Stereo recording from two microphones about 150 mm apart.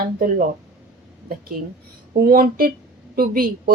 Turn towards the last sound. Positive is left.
turn(degrees=-75)  # may be behind; listen again after turning